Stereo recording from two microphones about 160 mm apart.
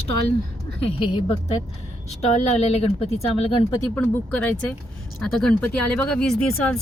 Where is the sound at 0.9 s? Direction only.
30° left (ahead or behind).